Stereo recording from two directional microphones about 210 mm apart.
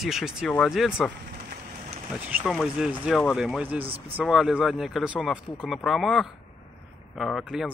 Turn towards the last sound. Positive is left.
turn(degrees=0)  # may be behind; listen again after turning